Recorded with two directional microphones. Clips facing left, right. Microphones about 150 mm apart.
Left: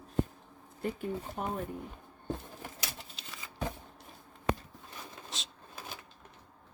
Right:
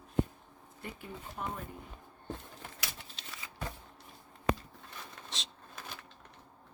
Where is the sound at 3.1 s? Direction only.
Centre (ahead or behind).